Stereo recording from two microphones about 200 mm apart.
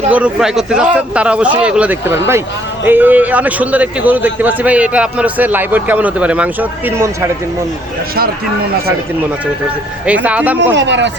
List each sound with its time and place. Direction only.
0.1 s a man's voice: 5° right (ahead or behind)
10.1 s a man's voice: 5° right (ahead or behind)
10.8 s speech: 60° right (ahead or behind)